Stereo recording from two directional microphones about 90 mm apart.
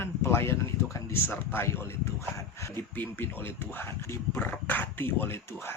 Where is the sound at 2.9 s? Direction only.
25° left (ahead or behind).